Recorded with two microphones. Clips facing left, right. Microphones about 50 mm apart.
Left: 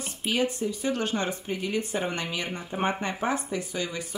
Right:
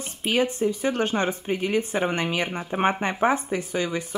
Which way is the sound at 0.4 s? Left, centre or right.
Right.